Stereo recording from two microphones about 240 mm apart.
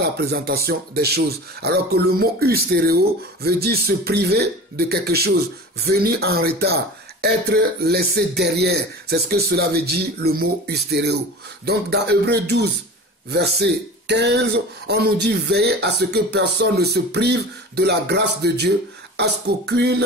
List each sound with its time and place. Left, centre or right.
0.0 s speech: right